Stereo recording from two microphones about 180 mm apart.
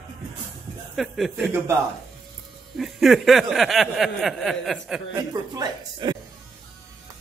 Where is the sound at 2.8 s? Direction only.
Centre (ahead or behind).